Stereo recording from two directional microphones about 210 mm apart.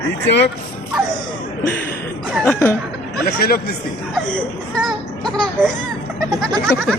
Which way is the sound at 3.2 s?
45° left (ahead or behind).